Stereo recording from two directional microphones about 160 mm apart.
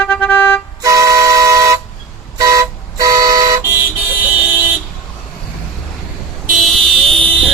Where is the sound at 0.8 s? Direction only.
20° right (ahead or behind).